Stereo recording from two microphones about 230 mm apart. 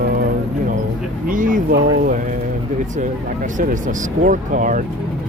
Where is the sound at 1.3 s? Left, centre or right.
Right.